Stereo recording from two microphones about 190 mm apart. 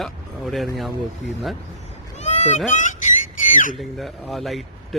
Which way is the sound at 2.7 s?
40° left (ahead or behind).